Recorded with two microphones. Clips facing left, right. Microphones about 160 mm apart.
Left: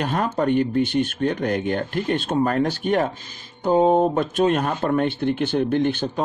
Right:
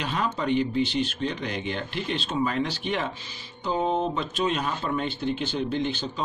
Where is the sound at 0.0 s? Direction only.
50° left (ahead or behind).